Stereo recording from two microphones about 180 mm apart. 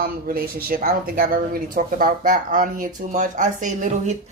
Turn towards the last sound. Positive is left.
turn(degrees=-45)  # may be behind; listen again after turning